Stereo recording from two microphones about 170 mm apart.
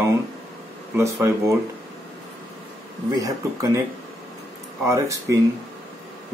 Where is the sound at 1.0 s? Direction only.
15° right (ahead or behind).